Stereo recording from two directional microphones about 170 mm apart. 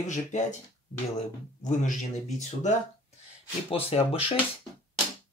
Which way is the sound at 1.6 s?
45° left (ahead or behind).